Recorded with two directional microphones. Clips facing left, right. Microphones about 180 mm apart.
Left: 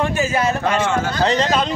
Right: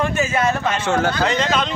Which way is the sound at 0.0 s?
35° left (ahead or behind).